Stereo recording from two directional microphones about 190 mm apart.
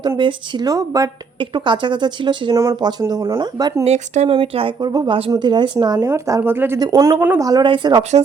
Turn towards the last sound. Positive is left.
turn(degrees=-25)  # may be behind; listen again after turning